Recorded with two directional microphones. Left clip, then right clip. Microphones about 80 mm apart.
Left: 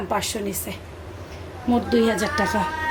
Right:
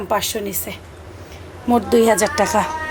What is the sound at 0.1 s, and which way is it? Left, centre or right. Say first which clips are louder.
Speech: right 6 dB; right.